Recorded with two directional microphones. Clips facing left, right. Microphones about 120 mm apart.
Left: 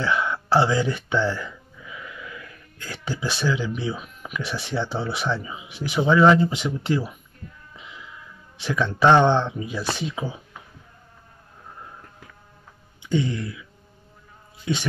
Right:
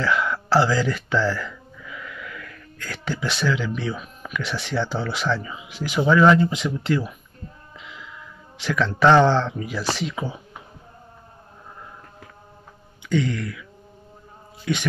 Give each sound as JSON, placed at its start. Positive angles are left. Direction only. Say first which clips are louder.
{"t": 0.0, "sound": "speech", "louder": "right 1 dB", "side_deg": 25}
{"t": 7.4, "sound": "music", "louder": "right 2 dB", "side_deg": -30}
{"t": 9.0, "sound": "speech", "louder": "right 1 dB", "side_deg": 25}
{"t": 13.1, "sound": "speech", "louder": "right 1 dB", "side_deg": 25}